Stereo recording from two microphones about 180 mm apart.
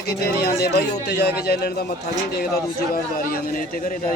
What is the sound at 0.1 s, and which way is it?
Speech, 60° left (ahead or behind).